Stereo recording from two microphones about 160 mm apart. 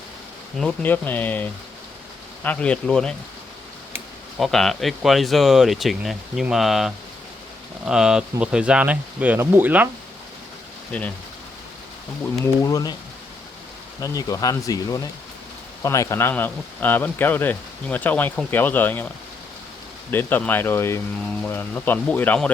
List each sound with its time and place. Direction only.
0.6 s speech: 10° left (ahead or behind)
4.4 s speech: centre (ahead or behind)
10.9 s speech: 10° left (ahead or behind)
12.6 s speech: 25° left (ahead or behind)
14.0 s speech: 20° left (ahead or behind)
20.1 s speech: 10° left (ahead or behind)